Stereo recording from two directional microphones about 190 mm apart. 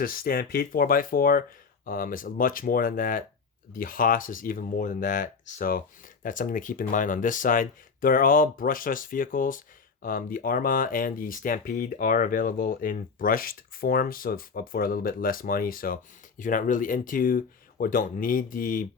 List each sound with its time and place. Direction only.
0.0 s speech: 50° left (ahead or behind)